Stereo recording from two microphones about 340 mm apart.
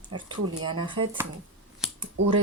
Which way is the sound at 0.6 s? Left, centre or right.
Centre.